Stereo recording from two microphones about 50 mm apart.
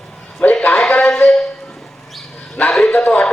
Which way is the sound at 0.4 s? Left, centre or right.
Left.